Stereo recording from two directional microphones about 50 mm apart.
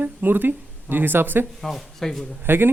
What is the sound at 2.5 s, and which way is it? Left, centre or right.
Speech, right.